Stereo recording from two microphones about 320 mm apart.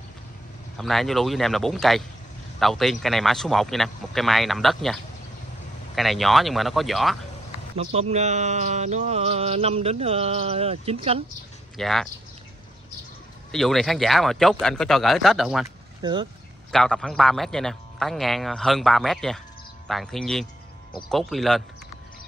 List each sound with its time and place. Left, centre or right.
0.7 s a man's voice: centre
5.9 s a man's voice: centre
7.7 s speech: centre
11.7 s speech: centre
13.5 s a man's voice: centre
16.0 s speech: centre
16.7 s a man's voice: centre